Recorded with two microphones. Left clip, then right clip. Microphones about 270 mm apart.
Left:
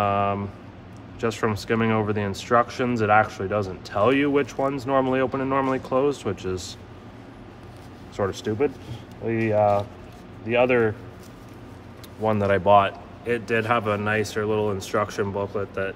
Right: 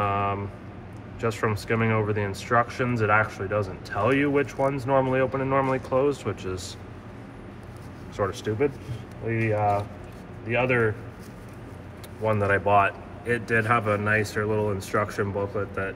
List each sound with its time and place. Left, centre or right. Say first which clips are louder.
0.0 s a sound: left 3 dB; left
1.2 s speech: left 2 dB; left
8.2 s speech: left 1 dB; left
12.2 s speech: left 2 dB; left